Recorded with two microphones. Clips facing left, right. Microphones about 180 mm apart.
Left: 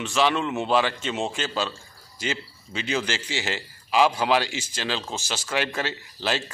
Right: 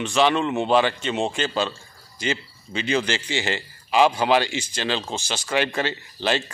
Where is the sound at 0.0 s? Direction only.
Centre (ahead or behind).